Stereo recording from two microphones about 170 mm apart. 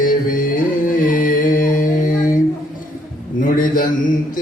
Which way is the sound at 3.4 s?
55° left (ahead or behind).